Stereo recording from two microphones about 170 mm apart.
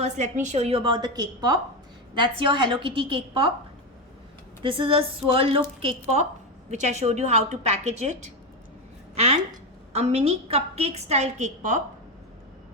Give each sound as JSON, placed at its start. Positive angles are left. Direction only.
{"t": 0.0, "sound": "a woman's voice", "side_deg": -45}
{"t": 4.6, "sound": "a woman's voice", "side_deg": -30}